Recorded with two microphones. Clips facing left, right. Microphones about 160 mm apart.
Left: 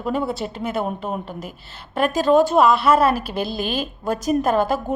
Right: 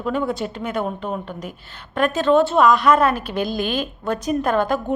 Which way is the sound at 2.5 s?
5° left (ahead or behind).